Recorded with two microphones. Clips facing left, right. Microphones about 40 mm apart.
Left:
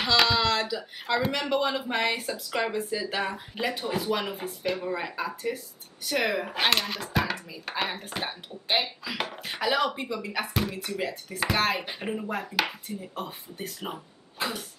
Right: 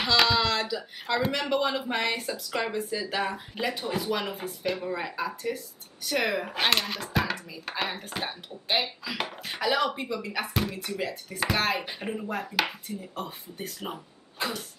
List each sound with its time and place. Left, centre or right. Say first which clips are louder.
0.0 s speech: even; centre
14.4 s cough: even; centre